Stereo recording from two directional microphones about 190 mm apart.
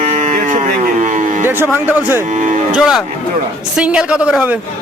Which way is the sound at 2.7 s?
5° right (ahead or behind).